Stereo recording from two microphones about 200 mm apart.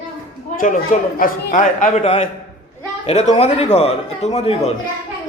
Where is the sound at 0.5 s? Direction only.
40° left (ahead or behind).